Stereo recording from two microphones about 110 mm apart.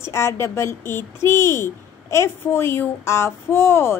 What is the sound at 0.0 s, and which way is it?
A child's voice, 25° left (ahead or behind).